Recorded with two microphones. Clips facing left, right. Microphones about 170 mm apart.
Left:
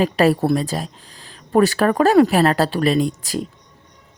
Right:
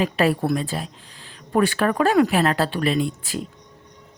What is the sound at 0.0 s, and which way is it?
Speech, 40° left (ahead or behind).